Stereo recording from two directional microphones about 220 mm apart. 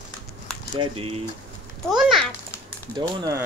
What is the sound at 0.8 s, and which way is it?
Speech, 25° right (ahead or behind).